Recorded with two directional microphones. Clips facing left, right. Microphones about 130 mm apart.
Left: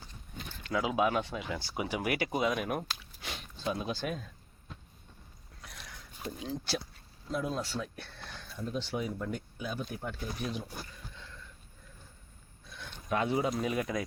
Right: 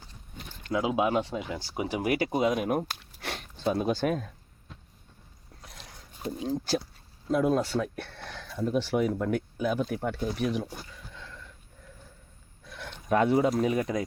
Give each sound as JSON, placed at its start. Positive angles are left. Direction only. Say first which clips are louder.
{"t": 0.7, "sound": "speech", "louder": "right 3 dB", "side_deg": -20}
{"t": 2.9, "sound": "biting", "louder": "right 5 dB", "side_deg": -60}
{"t": 3.8, "sound": "speech", "louder": "right 8 dB", "side_deg": -50}
{"t": 5.6, "sound": "a sound", "louder": "even", "side_deg": -30}
{"t": 7.3, "sound": "speech", "louder": "right 9 dB", "side_deg": -55}
{"t": 12.7, "sound": "a sound", "louder": "right 6 dB", "side_deg": -80}
{"t": 13.1, "sound": "speech", "louder": "right 7 dB", "side_deg": -50}